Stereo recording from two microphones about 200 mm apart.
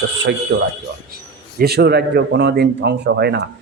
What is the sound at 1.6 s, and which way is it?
A man's voice, 55° right (ahead or behind).